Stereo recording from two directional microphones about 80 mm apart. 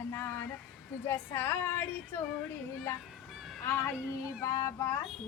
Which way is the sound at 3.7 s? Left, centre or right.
Left.